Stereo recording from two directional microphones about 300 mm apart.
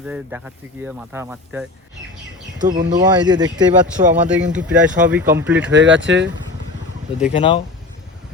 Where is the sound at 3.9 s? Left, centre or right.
Right.